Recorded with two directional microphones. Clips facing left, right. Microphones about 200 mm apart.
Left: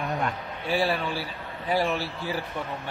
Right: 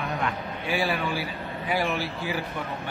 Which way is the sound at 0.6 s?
35° left (ahead or behind).